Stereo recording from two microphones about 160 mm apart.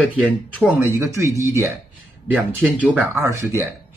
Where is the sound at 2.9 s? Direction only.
15° right (ahead or behind).